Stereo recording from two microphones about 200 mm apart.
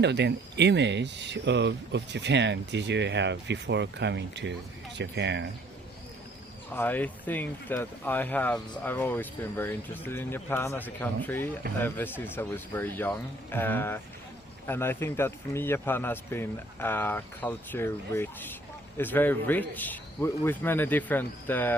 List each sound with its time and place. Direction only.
0.0 s speech: 60° right (ahead or behind)
6.7 s speech: 10° left (ahead or behind)